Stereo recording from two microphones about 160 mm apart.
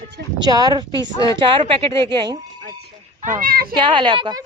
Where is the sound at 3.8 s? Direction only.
30° right (ahead or behind).